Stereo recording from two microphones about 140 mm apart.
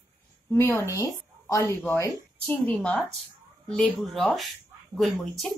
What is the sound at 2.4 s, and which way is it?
Speech, 10° left (ahead or behind).